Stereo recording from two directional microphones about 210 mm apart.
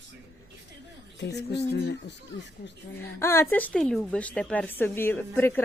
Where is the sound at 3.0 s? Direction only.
10° left (ahead or behind).